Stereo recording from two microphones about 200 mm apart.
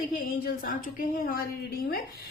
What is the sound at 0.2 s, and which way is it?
A woman's voice, 45° left (ahead or behind).